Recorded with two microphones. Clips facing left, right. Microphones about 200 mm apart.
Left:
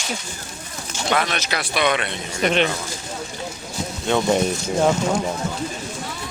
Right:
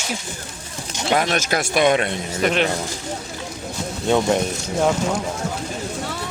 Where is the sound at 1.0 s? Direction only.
40° right (ahead or behind).